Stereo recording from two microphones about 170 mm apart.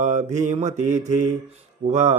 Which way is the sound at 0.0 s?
45° right (ahead or behind).